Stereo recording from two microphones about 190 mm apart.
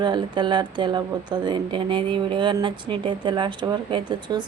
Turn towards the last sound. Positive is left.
turn(degrees=-25)  # may be behind; listen again after turning